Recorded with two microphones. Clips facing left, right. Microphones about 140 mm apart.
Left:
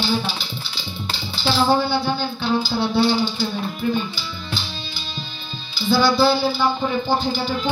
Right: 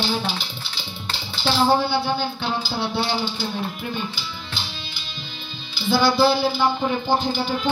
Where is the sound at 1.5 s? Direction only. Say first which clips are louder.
Even; 15° right (ahead or behind).